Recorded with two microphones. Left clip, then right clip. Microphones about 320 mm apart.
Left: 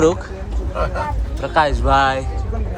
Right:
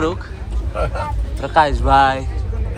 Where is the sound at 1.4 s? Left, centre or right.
Centre.